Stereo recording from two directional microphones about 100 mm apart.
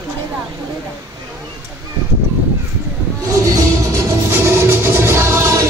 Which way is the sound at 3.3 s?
30° right (ahead or behind).